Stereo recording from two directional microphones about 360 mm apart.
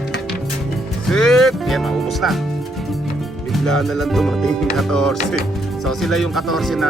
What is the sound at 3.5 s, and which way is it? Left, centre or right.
Speech, centre.